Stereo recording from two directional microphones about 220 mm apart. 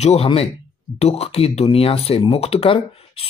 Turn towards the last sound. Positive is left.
turn(degrees=25)  # may be behind; listen again after turning